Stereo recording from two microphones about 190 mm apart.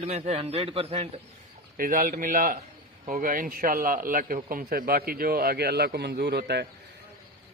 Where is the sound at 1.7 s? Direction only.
45° right (ahead or behind).